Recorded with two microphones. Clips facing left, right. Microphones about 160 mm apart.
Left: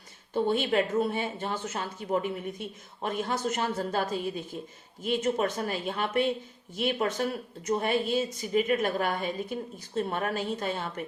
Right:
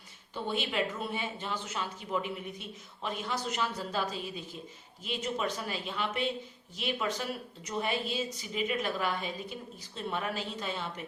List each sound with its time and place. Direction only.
0.3 s a woman's voice: 45° left (ahead or behind)